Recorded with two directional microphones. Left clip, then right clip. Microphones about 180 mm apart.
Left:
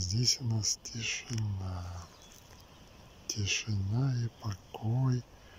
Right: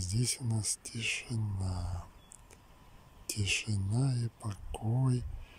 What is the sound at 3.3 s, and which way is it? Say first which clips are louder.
Speech: even; 10° right (ahead or behind).